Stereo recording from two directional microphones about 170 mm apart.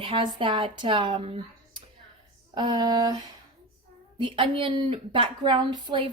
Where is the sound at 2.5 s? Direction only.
25° right (ahead or behind).